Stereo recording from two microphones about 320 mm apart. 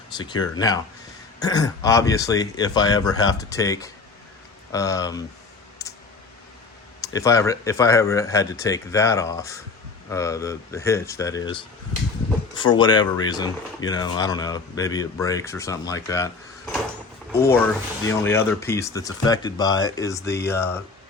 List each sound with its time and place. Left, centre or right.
0.2 s speech: centre
5.8 s a sound: centre
7.0 s speech: centre
17.3 s speech: centre